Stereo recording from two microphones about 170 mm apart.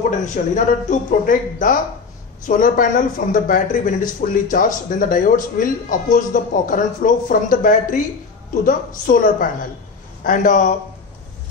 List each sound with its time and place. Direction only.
0.2 s speech: 45° left (ahead or behind)